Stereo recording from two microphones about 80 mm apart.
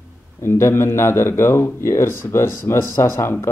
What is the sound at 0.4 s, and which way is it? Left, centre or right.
Speech, left.